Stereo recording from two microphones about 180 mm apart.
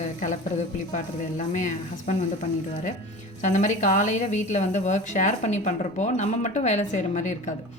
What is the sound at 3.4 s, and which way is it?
Speech, 45° left (ahead or behind).